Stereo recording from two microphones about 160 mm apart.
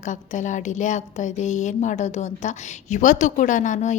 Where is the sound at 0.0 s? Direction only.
50° left (ahead or behind).